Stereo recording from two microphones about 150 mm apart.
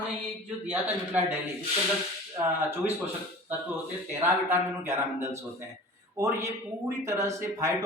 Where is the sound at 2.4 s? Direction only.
25° right (ahead or behind).